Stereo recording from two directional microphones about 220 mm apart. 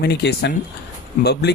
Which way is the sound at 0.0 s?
50° left (ahead or behind).